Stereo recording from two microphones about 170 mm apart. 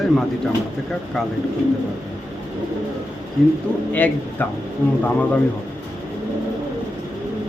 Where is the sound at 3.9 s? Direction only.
10° left (ahead or behind).